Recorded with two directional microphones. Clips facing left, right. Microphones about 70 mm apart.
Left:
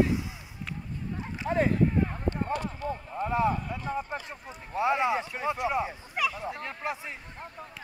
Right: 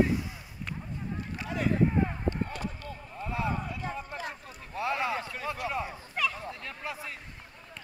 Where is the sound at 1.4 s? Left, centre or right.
Left.